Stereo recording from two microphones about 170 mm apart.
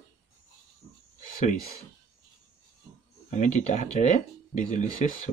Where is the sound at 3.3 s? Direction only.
45° left (ahead or behind).